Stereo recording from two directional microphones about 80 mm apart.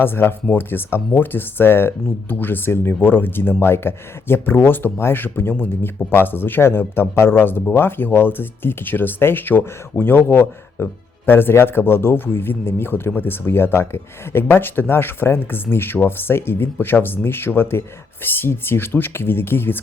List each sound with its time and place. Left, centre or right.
0.0 s speech: left